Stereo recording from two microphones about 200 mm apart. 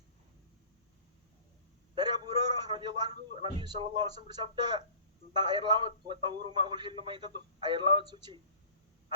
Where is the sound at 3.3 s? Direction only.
25° right (ahead or behind).